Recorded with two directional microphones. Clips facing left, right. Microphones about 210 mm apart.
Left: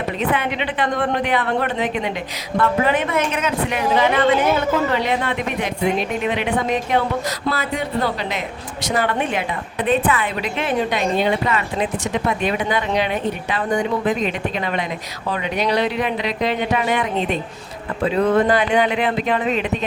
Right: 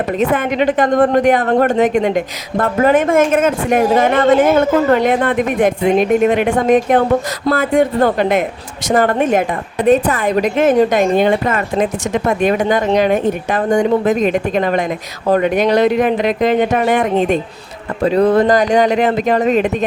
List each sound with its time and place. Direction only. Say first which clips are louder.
0.2 s speech: right 7 dB; 45° right (ahead or behind)